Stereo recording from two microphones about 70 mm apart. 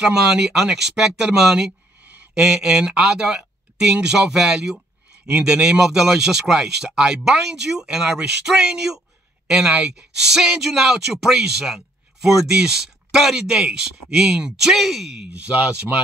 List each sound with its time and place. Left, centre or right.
0.0 s speech: centre
15.3 s speech: centre